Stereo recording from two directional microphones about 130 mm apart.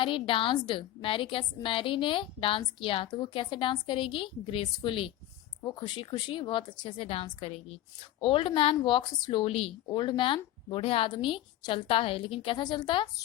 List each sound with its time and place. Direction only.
0.0 s speech: 40° left (ahead or behind)